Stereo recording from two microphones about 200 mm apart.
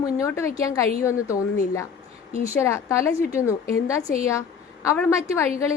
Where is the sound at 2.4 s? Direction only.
15° left (ahead or behind).